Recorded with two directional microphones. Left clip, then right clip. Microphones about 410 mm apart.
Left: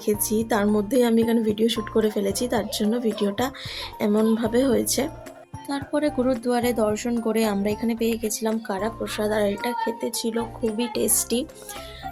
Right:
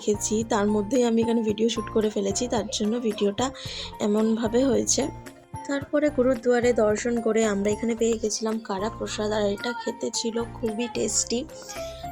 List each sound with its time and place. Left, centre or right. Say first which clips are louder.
0.3 s speech: left 2 dB; left